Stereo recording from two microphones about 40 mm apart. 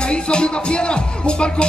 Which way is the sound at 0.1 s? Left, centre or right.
Left.